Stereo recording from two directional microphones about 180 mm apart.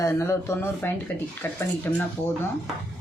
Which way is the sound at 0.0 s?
15° left (ahead or behind).